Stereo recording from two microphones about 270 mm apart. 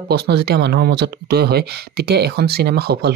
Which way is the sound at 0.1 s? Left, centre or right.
Right.